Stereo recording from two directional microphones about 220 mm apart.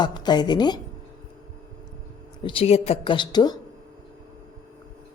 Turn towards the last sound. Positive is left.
turn(degrees=20)  # may be behind; listen again after turning